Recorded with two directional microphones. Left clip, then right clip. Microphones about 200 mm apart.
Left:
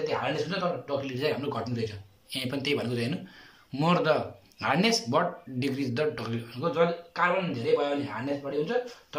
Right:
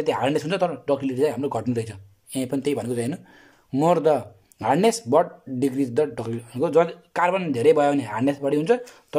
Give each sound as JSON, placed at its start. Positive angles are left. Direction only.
{"t": 0.0, "sound": "speech", "side_deg": -40}